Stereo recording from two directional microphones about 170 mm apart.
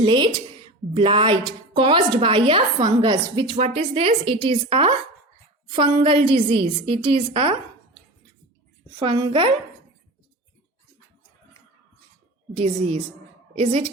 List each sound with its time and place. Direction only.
0.0 s a woman's voice: 30° right (ahead or behind)
9.0 s a woman's voice: 30° right (ahead or behind)
12.5 s a woman's voice: 35° right (ahead or behind)